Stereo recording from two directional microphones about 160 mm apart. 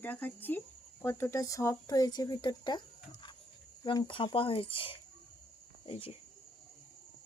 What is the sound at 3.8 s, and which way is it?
Speech, 25° left (ahead or behind).